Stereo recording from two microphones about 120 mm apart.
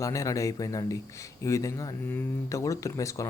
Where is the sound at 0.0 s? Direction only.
30° left (ahead or behind).